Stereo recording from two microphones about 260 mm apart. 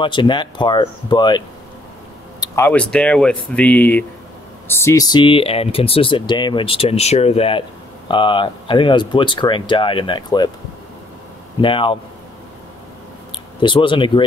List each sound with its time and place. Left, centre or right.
0.0 s speech: centre
2.4 s speech: centre
11.6 s speech: centre
13.6 s speech: centre